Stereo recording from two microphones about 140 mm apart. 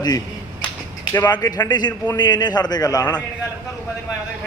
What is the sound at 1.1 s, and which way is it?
A man's voice, 25° left (ahead or behind).